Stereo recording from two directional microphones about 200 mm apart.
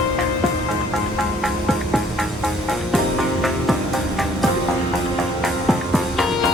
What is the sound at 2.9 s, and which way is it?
Music, centre (ahead or behind).